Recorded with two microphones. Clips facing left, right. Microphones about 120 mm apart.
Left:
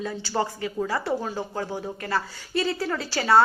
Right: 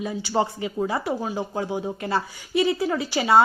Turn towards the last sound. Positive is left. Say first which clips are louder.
# right 1 dB
turn(degrees=-15)  # may be behind; listen again after turning